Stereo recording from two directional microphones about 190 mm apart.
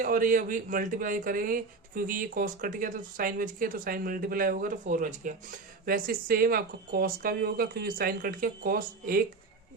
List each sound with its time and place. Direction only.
0.0 s speech: 45° right (ahead or behind)